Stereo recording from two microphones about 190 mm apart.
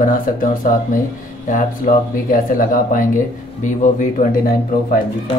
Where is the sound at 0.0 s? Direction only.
45° left (ahead or behind).